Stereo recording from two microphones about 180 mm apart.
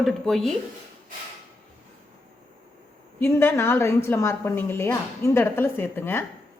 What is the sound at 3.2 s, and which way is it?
A woman's voice, 10° left (ahead or behind).